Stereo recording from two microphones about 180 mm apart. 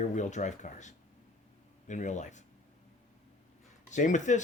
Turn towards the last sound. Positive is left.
turn(degrees=40)  # may be behind; listen again after turning